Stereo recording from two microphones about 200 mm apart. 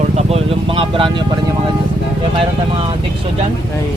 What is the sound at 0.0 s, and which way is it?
Speech, 30° right (ahead or behind).